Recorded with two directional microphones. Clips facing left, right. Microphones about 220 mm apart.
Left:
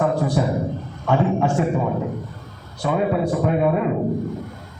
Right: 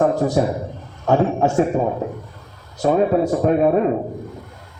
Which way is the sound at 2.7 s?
40° right (ahead or behind).